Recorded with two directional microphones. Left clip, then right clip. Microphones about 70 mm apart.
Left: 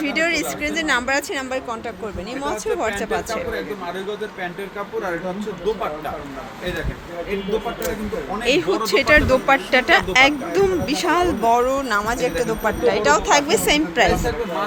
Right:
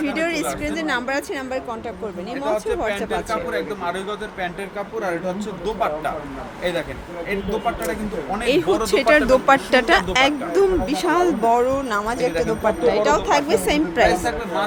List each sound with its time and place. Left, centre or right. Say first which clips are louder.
0.0 s a woman's voice: left 2 dB; centre
8.4 s a woman's voice: even; centre
8.7 s speech: left 1 dB; centre
9.2 s speech: right 1 dB; right
9.8 s speech: left 2 dB; right
10.8 s speech: even; centre
12.8 s a woman's voice: left 2 dB; centre